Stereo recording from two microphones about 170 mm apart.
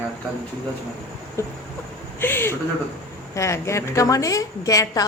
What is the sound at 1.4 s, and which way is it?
A woman's voice, 15° left (ahead or behind).